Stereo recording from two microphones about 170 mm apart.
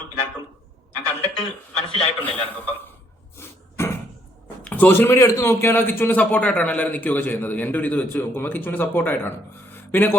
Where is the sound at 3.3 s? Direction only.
15° left (ahead or behind).